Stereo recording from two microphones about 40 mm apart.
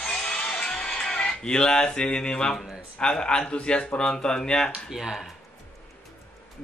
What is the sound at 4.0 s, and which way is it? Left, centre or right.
Speech, centre.